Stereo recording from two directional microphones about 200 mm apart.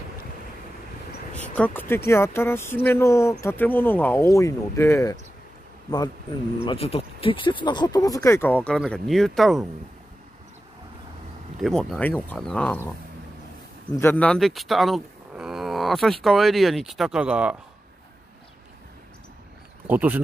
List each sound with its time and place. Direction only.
1.5 s speech: 10° left (ahead or behind)
6.6 s speech: 30° left (ahead or behind); by 9.7 s centre (ahead or behind)
11.6 s speech: centre (ahead or behind)
13.9 s speech: 10° left (ahead or behind)
19.9 s speech: 10° right (ahead or behind)